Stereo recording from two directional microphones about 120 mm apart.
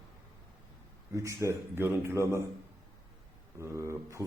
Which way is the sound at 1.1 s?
25° right (ahead or behind).